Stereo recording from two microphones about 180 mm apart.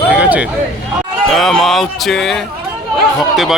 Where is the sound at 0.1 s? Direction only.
5° right (ahead or behind).